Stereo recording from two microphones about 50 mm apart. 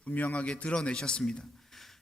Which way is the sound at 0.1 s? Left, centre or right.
Left.